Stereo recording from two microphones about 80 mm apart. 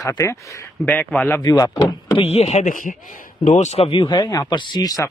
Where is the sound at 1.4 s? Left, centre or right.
Left.